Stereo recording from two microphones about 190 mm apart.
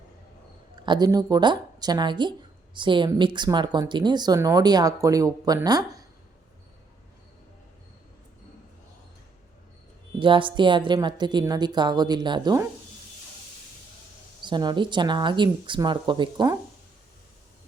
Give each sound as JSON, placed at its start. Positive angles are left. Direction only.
{"t": 0.9, "sound": "speech", "side_deg": -20}
{"t": 10.2, "sound": "speech", "side_deg": -25}
{"t": 14.4, "sound": "speech", "side_deg": -25}